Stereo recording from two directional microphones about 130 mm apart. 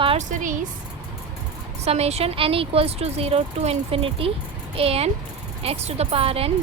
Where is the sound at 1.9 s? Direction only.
55° right (ahead or behind).